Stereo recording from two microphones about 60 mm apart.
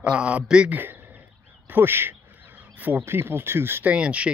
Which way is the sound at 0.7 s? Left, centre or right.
Right.